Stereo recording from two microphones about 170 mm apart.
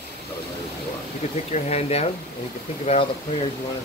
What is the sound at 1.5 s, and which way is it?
Speech, 40° left (ahead or behind).